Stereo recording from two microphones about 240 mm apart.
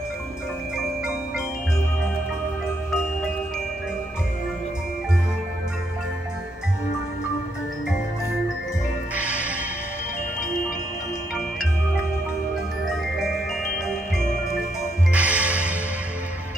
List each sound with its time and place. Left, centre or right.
9.1 s music: centre
15.1 s music: centre